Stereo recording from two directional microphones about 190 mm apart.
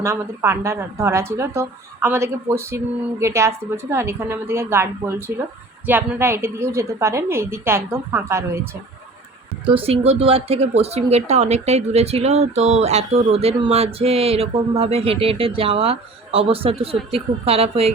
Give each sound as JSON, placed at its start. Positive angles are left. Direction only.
{"t": 0.0, "sound": "a woman's voice", "side_deg": -15}
{"t": 9.6, "sound": "speech", "side_deg": -30}